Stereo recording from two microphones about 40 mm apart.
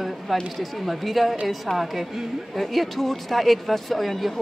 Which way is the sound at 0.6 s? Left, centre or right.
Centre.